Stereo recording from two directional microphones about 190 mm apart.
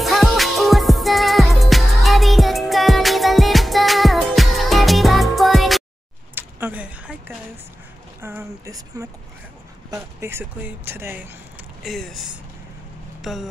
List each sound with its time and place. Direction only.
0.0 s music: centre (ahead or behind)
6.3 s a sound: 10° right (ahead or behind)
8.2 s speech: 15° right (ahead or behind)
11.8 s speech: centre (ahead or behind)